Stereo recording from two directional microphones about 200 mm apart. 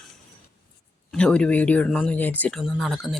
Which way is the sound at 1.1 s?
5° left (ahead or behind).